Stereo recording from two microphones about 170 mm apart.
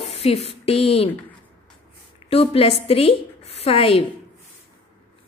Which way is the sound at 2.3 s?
35° left (ahead or behind).